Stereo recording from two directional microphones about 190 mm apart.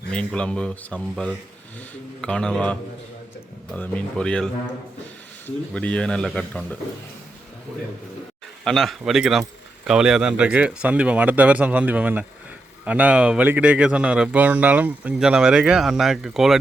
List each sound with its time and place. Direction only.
0.1 s speech: 5° left (ahead or behind)
5.7 s speech: 5° left (ahead or behind)
8.6 s speech: centre (ahead or behind)